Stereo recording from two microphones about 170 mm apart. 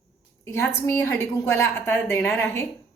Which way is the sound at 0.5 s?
15° left (ahead or behind).